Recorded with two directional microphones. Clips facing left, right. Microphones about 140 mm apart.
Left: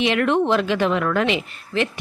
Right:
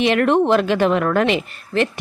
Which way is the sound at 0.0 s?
45° right (ahead or behind).